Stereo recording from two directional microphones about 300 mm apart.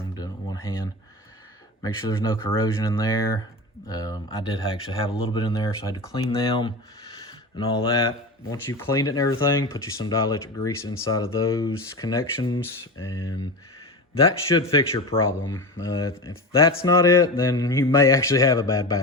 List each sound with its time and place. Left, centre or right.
0.2 s a sound: centre
1.8 s speech: centre
13.0 s speech: left
14.3 s speech: centre